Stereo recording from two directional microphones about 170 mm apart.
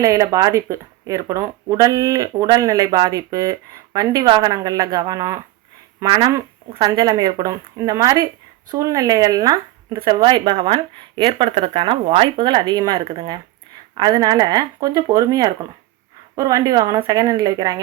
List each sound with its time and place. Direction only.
0.0 s speech: 20° right (ahead or behind)
6.7 s speech: 25° right (ahead or behind)